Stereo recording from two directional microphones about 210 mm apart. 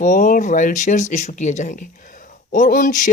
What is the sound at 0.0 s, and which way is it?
Speech, 35° left (ahead or behind).